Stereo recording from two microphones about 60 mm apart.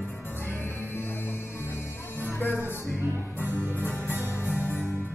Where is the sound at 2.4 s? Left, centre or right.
Left.